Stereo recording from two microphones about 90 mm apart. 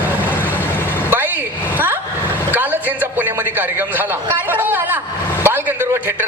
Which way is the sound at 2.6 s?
20° right (ahead or behind).